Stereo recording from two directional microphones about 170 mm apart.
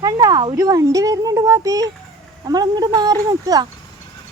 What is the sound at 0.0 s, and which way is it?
A woman's voice, 25° right (ahead or behind).